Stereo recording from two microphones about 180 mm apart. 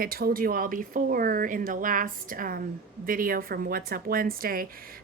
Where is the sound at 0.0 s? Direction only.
55° right (ahead or behind).